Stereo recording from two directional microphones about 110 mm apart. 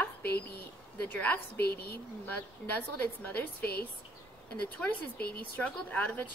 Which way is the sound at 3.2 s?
15° left (ahead or behind).